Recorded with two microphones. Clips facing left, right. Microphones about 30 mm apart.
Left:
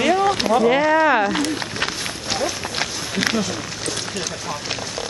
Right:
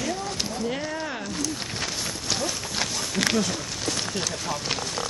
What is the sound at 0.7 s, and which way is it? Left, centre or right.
Speech, left.